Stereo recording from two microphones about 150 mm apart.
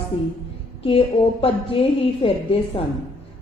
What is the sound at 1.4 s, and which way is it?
A woman's voice, 35° left (ahead or behind).